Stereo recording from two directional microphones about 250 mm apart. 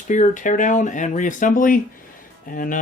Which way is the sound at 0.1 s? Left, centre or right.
Left.